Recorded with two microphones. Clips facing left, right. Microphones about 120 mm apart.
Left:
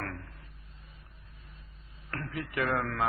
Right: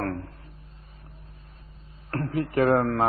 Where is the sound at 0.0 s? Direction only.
35° right (ahead or behind).